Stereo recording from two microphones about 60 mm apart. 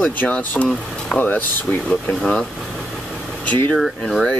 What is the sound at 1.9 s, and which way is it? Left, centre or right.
Speech, centre.